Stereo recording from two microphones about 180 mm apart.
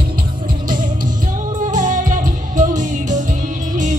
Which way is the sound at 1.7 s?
45° right (ahead or behind).